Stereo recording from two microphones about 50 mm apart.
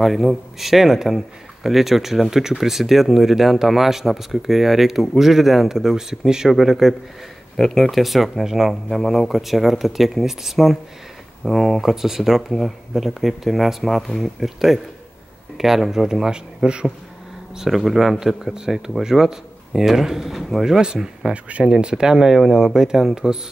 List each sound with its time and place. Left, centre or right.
0.0 s a man's voice: centre
7.5 s a man's voice: centre
17.6 s speech: centre
21.3 s speech: right